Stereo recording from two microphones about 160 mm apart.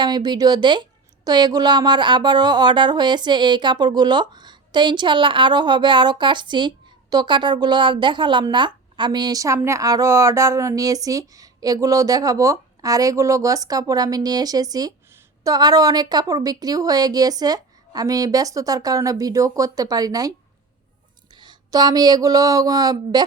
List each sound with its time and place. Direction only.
0.0 s a woman's voice: 25° right (ahead or behind)
21.4 s a woman's voice: 25° right (ahead or behind)